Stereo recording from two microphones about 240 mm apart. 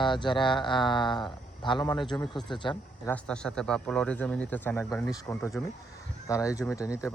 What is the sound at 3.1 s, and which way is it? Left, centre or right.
Speech, centre.